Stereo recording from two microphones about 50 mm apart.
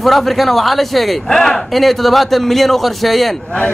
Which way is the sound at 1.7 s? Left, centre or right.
Centre.